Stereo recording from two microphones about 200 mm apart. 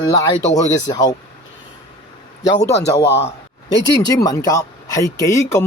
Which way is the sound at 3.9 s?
20° left (ahead or behind).